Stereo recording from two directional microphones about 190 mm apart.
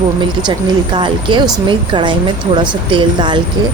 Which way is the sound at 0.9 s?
25° right (ahead or behind).